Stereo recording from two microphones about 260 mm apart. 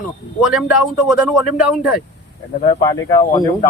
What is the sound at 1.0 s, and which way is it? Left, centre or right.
Speech, centre.